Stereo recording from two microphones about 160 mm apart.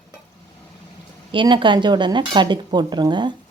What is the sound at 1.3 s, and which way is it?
Speech, 30° right (ahead or behind).